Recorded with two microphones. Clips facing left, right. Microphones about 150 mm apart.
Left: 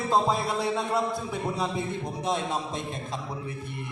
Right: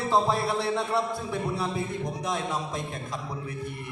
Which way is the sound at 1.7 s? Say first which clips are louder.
Even; 30° left (ahead or behind).